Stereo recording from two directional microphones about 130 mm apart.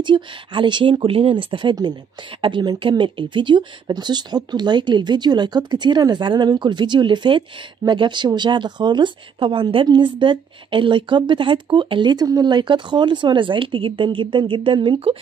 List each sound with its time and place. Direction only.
0.0 s speech: 40° right (ahead or behind)